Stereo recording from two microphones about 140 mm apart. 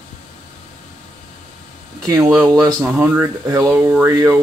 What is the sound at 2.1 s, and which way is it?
Speech, 20° right (ahead or behind).